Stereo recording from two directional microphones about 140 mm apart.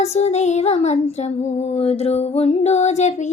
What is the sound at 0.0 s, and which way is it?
Child singing, 50° left (ahead or behind).